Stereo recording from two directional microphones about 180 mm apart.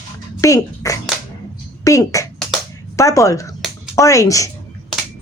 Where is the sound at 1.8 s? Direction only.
15° left (ahead or behind).